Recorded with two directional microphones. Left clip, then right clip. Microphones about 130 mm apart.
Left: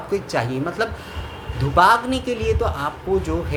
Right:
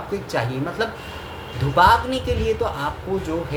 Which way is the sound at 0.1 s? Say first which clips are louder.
Left 3 dB; 35° left (ahead or behind).